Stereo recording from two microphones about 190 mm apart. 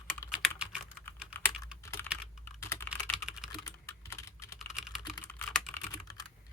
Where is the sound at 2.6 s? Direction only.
15° left (ahead or behind).